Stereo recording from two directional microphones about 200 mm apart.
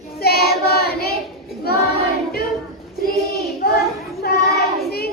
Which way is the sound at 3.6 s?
50° left (ahead or behind).